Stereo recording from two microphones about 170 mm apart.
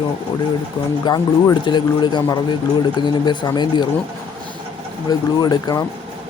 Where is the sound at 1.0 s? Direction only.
25° left (ahead or behind).